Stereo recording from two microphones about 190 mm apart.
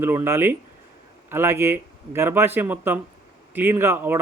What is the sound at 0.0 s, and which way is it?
Speech, 10° right (ahead or behind).